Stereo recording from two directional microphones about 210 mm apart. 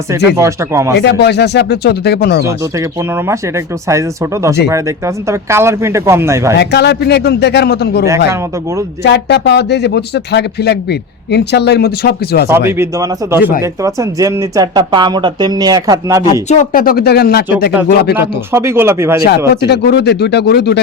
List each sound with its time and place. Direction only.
0.3 s speech: 15° right (ahead or behind)
0.9 s speech: 55° left (ahead or behind)
2.5 s speech: 15° right (ahead or behind)
6.6 s speech: 50° left (ahead or behind)
9.0 s speech: 55° left (ahead or behind)
12.5 s speech: 10° right (ahead or behind)
16.2 s speech: 35° left (ahead or behind)
18.2 s speech: 10° right (ahead or behind)
19.6 s speech: 50° left (ahead or behind)